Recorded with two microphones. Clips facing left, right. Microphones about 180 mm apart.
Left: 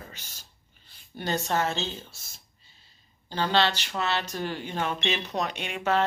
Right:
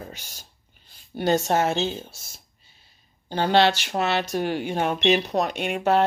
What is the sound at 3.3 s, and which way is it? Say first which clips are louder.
A woman's voice: right 6 dB; 55° right (ahead or behind).